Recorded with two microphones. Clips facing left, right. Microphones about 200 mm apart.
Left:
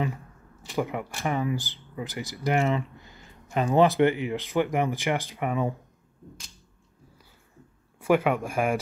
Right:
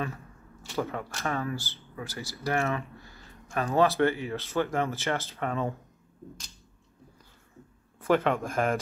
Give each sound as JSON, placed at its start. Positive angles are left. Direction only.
{"t": 0.7, "sound": "speech", "side_deg": 15}
{"t": 8.0, "sound": "speech", "side_deg": 10}